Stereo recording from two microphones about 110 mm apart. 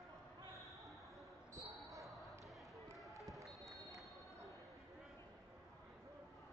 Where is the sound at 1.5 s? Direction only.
30° right (ahead or behind).